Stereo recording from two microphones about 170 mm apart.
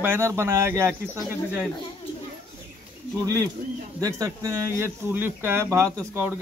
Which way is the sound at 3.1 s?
20° right (ahead or behind).